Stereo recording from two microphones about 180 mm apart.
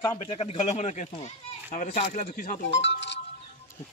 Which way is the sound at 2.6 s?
80° left.